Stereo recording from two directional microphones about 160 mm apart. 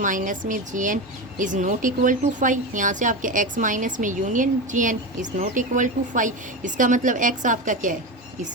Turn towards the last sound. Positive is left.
turn(degrees=-55)  # may be behind; listen again after turning